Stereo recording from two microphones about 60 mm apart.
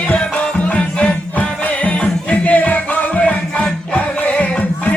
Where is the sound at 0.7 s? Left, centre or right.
Left.